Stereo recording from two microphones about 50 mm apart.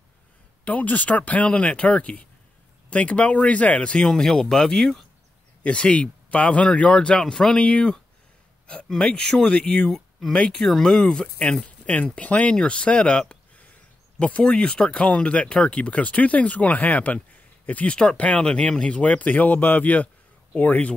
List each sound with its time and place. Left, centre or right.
0.7 s speech: left
4.0 s speech: centre
5.6 s speech: left
8.8 s speech: centre
10.3 s speech: centre
10.6 s speech: centre; by 20.9 s left